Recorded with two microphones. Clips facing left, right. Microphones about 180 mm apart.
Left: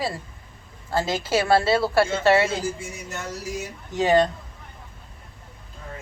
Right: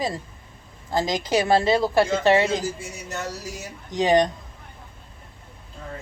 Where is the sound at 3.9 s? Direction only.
15° right (ahead or behind).